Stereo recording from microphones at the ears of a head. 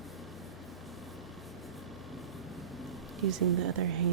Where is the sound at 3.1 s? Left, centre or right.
Right.